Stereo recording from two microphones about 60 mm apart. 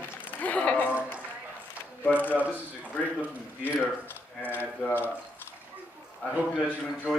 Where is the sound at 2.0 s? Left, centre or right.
Left.